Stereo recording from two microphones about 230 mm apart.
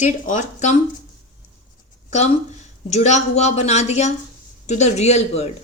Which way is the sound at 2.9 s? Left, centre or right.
Left.